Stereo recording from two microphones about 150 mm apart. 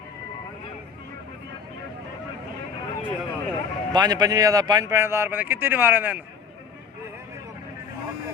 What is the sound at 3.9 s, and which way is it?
A man's voice, 25° right (ahead or behind).